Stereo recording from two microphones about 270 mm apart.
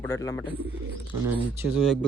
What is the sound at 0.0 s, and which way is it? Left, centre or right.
Speech, centre.